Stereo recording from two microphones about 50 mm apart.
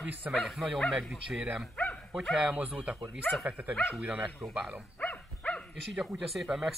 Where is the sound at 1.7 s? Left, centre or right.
Left.